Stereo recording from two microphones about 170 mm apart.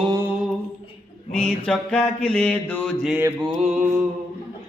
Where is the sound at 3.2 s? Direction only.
10° right (ahead or behind).